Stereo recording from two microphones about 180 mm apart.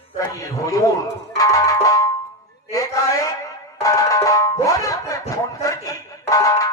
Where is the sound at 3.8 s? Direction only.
20° left (ahead or behind).